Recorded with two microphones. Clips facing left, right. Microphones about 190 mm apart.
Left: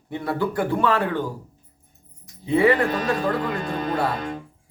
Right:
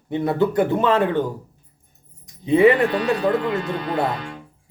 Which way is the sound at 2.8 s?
45° left (ahead or behind).